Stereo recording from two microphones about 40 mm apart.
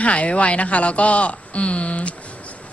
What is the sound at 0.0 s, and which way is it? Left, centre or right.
Speech, left.